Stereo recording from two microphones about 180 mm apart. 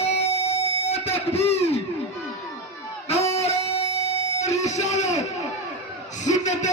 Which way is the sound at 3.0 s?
35° left (ahead or behind).